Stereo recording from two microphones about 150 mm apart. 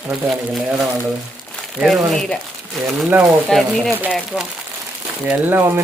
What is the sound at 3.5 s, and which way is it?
Speech, centre (ahead or behind).